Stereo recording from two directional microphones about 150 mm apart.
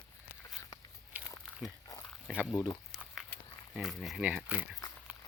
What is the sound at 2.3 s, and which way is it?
Speech, 5° right (ahead or behind).